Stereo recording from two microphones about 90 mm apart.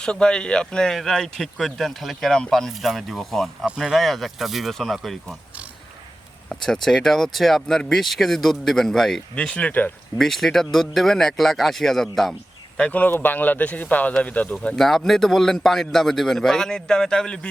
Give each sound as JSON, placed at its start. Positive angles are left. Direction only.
{"t": 0.0, "sound": "speech", "side_deg": 10}
{"t": 6.5, "sound": "speech", "side_deg": 5}
{"t": 10.2, "sound": "speech", "side_deg": 0}